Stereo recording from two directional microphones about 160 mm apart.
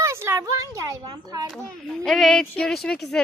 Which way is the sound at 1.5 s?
Centre (ahead or behind).